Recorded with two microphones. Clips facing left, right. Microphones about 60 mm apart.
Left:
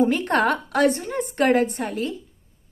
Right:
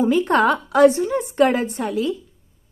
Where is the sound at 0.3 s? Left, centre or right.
Left.